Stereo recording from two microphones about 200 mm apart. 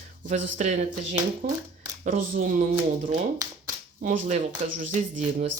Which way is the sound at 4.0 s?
40° right (ahead or behind).